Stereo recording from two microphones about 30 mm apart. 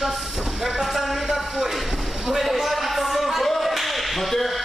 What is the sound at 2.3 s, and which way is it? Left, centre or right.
Whip, centre.